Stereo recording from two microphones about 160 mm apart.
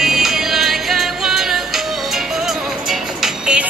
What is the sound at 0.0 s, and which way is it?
Music, centre (ahead or behind).